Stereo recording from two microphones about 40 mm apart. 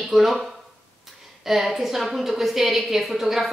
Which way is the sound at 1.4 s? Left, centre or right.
Centre.